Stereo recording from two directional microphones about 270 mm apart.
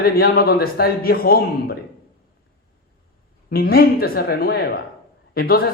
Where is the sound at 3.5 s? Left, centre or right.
Left.